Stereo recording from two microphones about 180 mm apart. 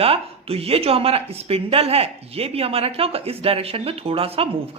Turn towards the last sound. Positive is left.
turn(degrees=-30)  # may be behind; listen again after turning